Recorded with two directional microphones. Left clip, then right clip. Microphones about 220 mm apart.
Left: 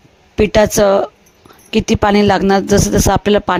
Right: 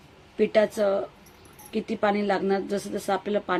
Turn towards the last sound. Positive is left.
turn(degrees=50)  # may be behind; listen again after turning